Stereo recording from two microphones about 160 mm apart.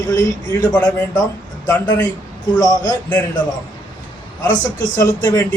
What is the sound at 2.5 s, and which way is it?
Speech, 25° left (ahead or behind).